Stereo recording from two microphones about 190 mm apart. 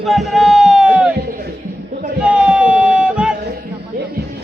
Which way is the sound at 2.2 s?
5° right (ahead or behind).